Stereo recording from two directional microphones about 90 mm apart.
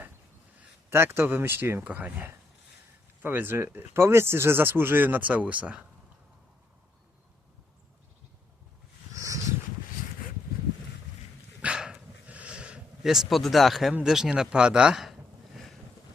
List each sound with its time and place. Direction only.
0.9 s speech: 25° right (ahead or behind)
9.1 s a sound: 35° right (ahead or behind)
11.6 s dog: 10° right (ahead or behind)
14.0 s speech: 5° right (ahead or behind)